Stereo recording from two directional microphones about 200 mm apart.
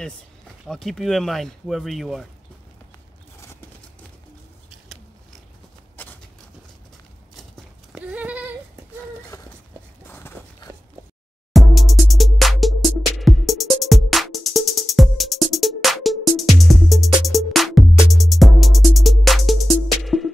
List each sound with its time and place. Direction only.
0.7 s speech: centre (ahead or behind)
4.6 s a sound: centre (ahead or behind)
7.3 s goat: centre (ahead or behind)
9.3 s a sound: 15° left (ahead or behind)
10.0 s walk: 10° left (ahead or behind)
11.5 s music: centre (ahead or behind)